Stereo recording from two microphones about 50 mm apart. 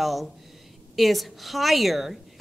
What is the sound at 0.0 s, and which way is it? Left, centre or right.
A woman's voice, centre.